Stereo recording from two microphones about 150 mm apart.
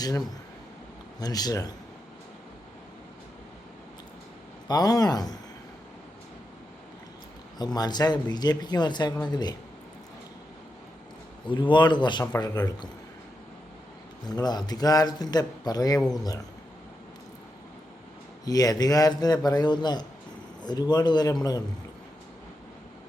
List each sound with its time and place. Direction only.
0.0 s a man's voice: 25° left (ahead or behind)
4.7 s a man's voice: 25° left (ahead or behind)
7.6 s a man's voice: 30° left (ahead or behind)
11.4 s a man's voice: 30° left (ahead or behind)
14.3 s a man's voice: 25° left (ahead or behind)
16.0 s speech: centre (ahead or behind)
18.4 s a man's voice: 25° left (ahead or behind)